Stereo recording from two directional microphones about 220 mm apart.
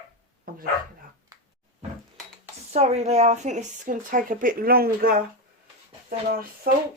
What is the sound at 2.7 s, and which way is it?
Speech, 30° right (ahead or behind).